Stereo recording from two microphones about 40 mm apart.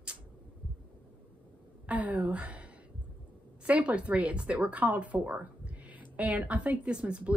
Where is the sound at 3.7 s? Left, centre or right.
Right.